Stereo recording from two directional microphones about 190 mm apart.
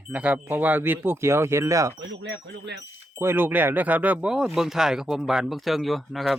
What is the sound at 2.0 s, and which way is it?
Speech, 70° right (ahead or behind).